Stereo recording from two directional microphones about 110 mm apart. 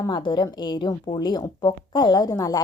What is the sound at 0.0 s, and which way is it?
Speech, 45° left (ahead or behind).